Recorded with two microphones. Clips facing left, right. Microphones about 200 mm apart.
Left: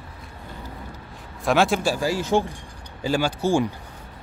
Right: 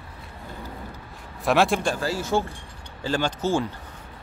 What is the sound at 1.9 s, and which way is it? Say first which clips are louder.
Speech: left 3 dB; 15° left (ahead or behind).